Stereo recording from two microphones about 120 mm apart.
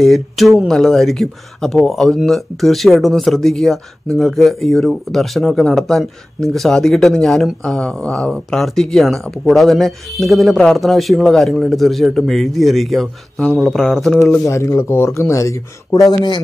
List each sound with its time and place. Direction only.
0.0 s speech: centre (ahead or behind)
14.4 s speech: 25° left (ahead or behind)